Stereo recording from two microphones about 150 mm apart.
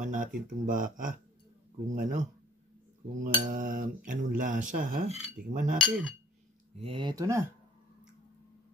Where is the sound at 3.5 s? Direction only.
65° right (ahead or behind).